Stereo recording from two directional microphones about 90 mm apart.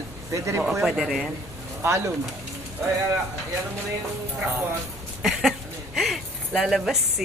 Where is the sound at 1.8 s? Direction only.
30° right (ahead or behind).